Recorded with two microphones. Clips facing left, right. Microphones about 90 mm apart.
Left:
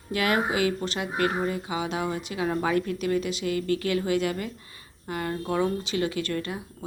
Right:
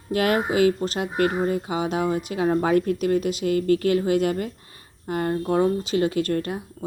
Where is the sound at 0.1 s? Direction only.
45° right (ahead or behind).